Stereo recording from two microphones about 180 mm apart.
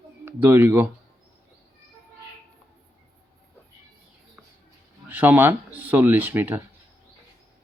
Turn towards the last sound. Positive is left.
turn(degrees=-10)  # may be behind; listen again after turning